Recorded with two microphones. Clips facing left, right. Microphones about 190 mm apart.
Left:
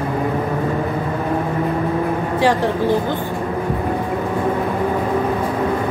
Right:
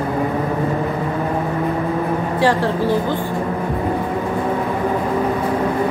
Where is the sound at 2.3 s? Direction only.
15° left (ahead or behind).